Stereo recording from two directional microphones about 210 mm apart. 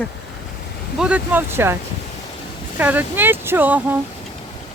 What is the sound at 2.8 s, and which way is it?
Speech, 10° right (ahead or behind).